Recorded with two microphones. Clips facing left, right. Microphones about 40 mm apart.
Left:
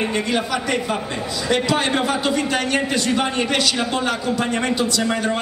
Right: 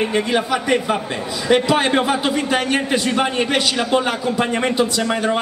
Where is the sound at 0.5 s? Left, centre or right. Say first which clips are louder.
Right 4 dB; centre.